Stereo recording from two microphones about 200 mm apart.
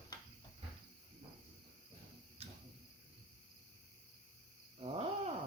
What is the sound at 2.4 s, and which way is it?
Tick-tock, 30° right (ahead or behind).